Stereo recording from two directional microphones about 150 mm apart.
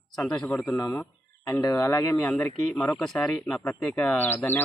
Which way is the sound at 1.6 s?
25° left (ahead or behind).